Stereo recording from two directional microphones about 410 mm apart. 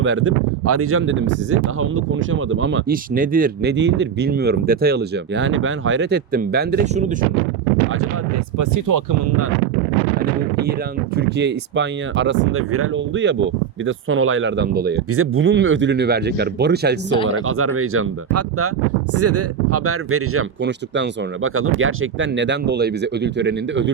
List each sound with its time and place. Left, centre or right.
0.0 s speech: right
8.5 s speech: right
11.2 s speech: right